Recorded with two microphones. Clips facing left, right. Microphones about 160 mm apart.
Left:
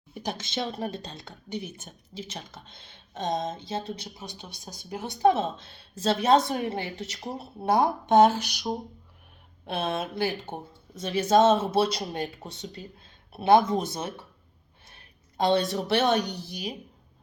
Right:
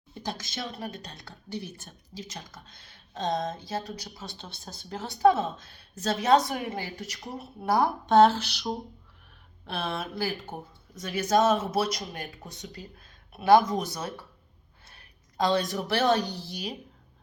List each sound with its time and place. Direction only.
0.1 s speech: 20° left (ahead or behind)
14.8 s a sound: 25° left (ahead or behind)
15.5 s speech: 25° left (ahead or behind)